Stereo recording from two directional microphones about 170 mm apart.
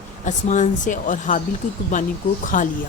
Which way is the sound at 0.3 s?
45° left (ahead or behind).